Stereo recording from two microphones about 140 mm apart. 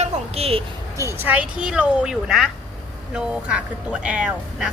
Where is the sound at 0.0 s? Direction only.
45° right (ahead or behind).